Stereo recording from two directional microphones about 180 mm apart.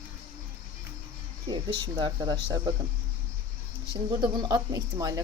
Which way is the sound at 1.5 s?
25° right (ahead or behind).